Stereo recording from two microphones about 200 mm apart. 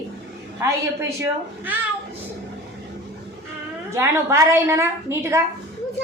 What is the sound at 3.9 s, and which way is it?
A woman's voice, 15° right (ahead or behind).